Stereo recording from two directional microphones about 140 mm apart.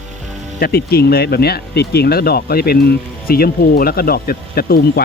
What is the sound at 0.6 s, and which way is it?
Speech, 90° left.